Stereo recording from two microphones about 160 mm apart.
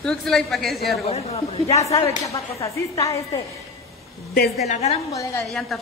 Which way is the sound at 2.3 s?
20° left (ahead or behind).